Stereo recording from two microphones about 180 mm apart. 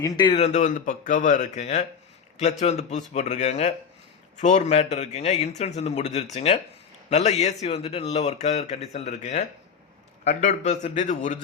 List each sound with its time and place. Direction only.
0.0 s speech: 25° left (ahead or behind); by 11.3 s 45° left (ahead or behind)